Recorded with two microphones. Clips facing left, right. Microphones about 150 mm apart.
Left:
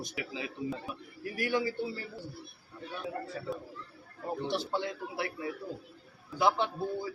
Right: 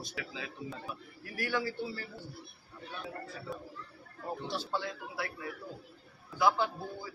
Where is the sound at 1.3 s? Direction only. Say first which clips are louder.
Left 3 dB; 15° left (ahead or behind).